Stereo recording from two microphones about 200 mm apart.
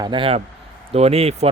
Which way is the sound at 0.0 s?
25° right (ahead or behind).